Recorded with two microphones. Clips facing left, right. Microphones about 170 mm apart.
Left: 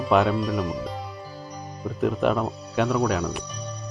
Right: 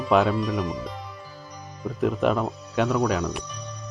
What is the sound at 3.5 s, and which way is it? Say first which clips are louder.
Music: left 2 dB; 35° left (ahead or behind).